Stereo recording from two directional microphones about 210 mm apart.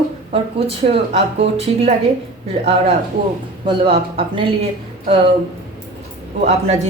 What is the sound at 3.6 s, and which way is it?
Speech, 25° right (ahead or behind).